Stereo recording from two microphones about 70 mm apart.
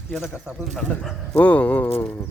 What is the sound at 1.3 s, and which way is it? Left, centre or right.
Speech, left.